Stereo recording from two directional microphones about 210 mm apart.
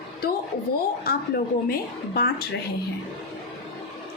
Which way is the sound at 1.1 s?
45° left (ahead or behind).